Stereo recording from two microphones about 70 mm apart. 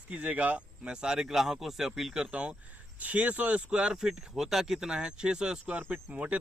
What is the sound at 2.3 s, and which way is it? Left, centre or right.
Speech, centre.